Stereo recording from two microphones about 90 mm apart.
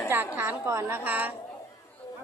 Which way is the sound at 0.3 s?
30° right (ahead or behind).